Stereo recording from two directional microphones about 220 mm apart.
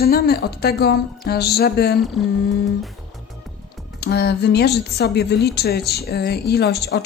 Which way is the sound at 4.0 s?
50° left (ahead or behind).